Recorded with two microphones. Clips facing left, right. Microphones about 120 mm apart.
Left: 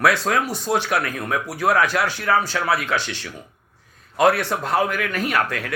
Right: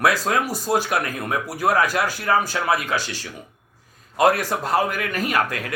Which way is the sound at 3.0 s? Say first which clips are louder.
Left 1 dB; 10° right (ahead or behind).